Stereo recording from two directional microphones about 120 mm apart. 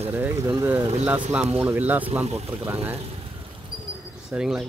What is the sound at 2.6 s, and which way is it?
Speech, 15° right (ahead or behind).